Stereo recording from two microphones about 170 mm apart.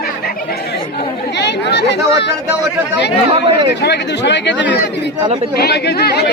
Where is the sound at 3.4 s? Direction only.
90° left.